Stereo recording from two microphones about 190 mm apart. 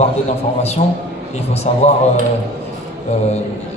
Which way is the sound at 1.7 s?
35° left (ahead or behind).